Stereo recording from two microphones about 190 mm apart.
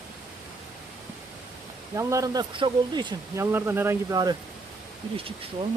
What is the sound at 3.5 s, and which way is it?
Speech, 10° right (ahead or behind).